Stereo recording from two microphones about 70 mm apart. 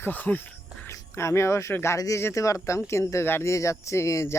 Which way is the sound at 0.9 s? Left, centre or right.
Left.